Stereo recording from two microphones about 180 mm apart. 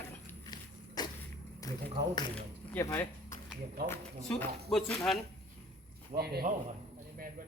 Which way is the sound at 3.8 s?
10° left (ahead or behind).